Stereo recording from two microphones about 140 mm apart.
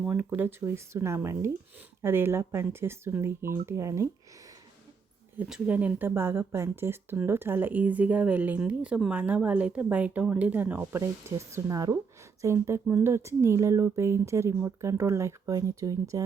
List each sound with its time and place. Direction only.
0.0 s speech: 10° right (ahead or behind)
5.4 s speech: 10° right (ahead or behind)